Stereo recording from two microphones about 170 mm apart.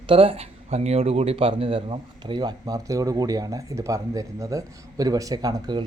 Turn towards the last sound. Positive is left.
turn(degrees=-25)  # may be behind; listen again after turning